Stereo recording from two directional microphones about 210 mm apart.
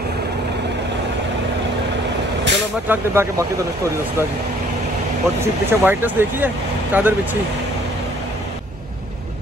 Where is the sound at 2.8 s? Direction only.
10° right (ahead or behind).